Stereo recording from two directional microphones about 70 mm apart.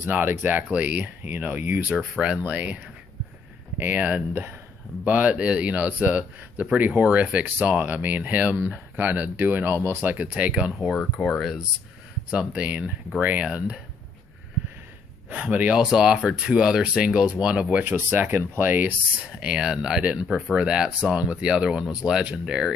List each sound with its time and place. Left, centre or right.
0.0 s speech: right
11.2 s speech: centre
12.3 s speech: centre
15.2 s speech: centre
15.8 s speech: centre; by 18.9 s right
19.2 s speech: centre
20.2 s speech: centre
20.5 s speech: centre